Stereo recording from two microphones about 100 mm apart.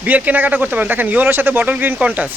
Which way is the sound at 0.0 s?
15° right (ahead or behind).